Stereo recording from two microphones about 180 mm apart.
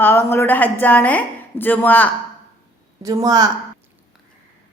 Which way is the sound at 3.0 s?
20° right (ahead or behind).